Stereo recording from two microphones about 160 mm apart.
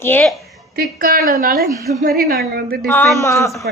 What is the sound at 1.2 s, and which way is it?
A woman's voice, 65° right (ahead or behind).